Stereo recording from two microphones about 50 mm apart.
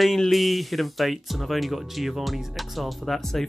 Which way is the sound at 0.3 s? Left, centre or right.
Centre.